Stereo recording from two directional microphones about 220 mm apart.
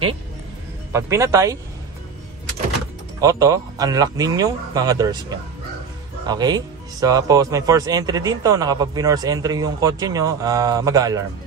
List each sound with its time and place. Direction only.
0.9 s speech: 15° right (ahead or behind)
3.2 s speech: 15° right (ahead or behind)